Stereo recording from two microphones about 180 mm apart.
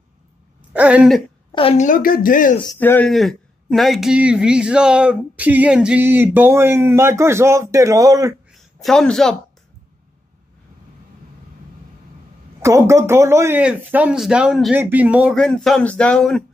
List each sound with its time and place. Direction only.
0.7 s speech: 5° right (ahead or behind)
1.5 s a woman's voice: 30° left (ahead or behind)
1.9 s speech: 50° left (ahead or behind)
2.8 s speech: 10° left (ahead or behind); by 8.4 s 20° right (ahead or behind)
8.5 s a sound: centre (ahead or behind)
12.6 s speech: 15° right (ahead or behind)
15.3 s speech: centre (ahead or behind)